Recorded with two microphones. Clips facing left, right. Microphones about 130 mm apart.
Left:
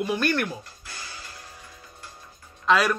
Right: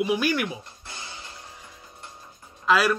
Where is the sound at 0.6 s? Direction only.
20° right (ahead or behind).